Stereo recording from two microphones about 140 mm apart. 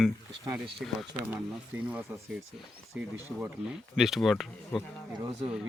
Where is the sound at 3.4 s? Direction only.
5° right (ahead or behind).